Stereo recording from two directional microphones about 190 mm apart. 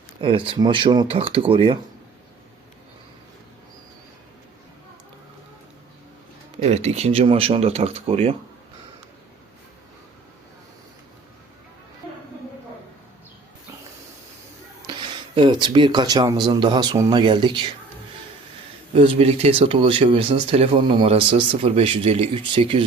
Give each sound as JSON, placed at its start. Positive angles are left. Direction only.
{"t": 0.2, "sound": "speech", "side_deg": -25}
{"t": 6.6, "sound": "speech", "side_deg": -35}
{"t": 14.9, "sound": "a sound", "side_deg": -25}
{"t": 15.4, "sound": "speech", "side_deg": -25}
{"t": 18.9, "sound": "speech", "side_deg": -30}